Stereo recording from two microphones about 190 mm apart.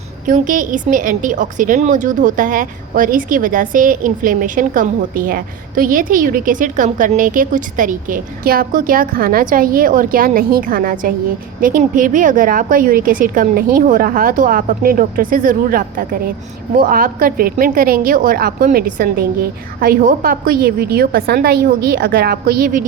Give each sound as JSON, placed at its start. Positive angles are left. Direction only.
{"t": 0.3, "sound": "a woman's voice", "side_deg": -45}